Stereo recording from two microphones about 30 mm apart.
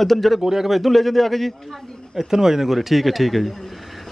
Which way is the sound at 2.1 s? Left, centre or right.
Centre.